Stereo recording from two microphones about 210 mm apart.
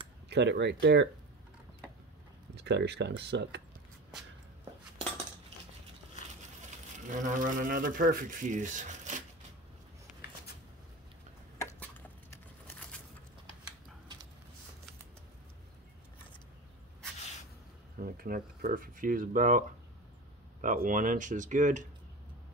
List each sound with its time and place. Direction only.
0.3 s speech: 55° right (ahead or behind)
2.5 s speech: 55° right (ahead or behind)
7.1 s speech: 35° right (ahead or behind)
11.5 s a sound: 10° left (ahead or behind)
18.0 s speech: 45° right (ahead or behind)
20.6 s speech: 40° right (ahead or behind)